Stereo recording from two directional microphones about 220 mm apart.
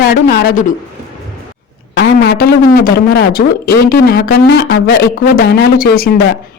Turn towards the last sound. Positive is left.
turn(degrees=45)  # may be behind; listen again after turning